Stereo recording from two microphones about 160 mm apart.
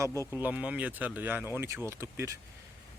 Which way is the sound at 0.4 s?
10° right (ahead or behind).